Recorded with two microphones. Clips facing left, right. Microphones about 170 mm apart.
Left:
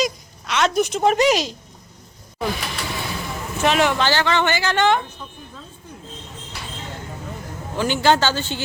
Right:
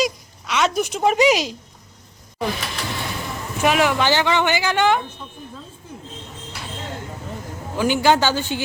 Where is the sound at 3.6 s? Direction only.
5° right (ahead or behind).